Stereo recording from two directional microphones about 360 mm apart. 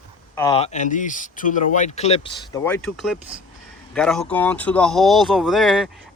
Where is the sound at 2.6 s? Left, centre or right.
Centre.